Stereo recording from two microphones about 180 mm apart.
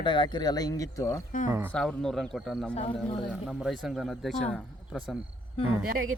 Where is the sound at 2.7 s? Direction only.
40° left (ahead or behind).